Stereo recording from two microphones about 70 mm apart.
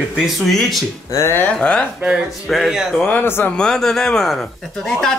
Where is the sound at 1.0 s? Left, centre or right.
Left.